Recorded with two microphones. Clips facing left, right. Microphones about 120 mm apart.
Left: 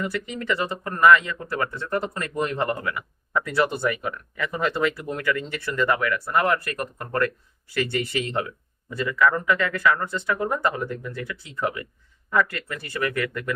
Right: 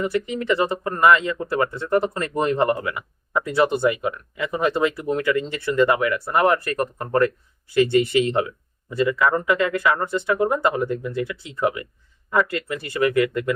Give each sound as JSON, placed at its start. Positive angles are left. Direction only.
{"t": 0.0, "sound": "speech", "side_deg": -20}